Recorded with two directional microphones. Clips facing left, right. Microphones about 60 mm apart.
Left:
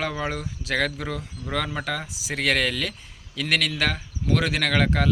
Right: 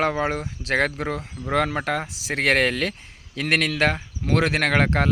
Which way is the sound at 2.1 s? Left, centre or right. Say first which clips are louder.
Right 3 dB; right.